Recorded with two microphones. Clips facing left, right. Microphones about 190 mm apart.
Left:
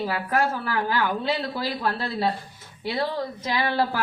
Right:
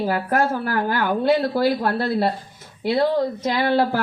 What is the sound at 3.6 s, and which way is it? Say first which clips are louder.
Speech: right 6 dB; 55° right (ahead or behind).